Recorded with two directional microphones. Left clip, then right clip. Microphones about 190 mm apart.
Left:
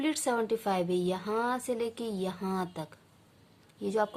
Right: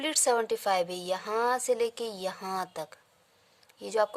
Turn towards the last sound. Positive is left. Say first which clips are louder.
# right 2 dB
turn(degrees=-40)  # may be behind; listen again after turning